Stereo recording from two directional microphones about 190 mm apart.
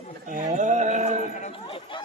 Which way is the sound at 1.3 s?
35° left (ahead or behind).